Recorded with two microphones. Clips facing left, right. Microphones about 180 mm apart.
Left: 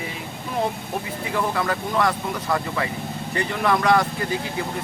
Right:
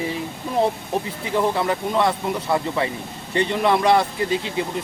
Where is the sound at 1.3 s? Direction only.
25° right (ahead or behind).